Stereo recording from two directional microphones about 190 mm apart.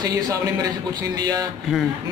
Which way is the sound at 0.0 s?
20° right (ahead or behind).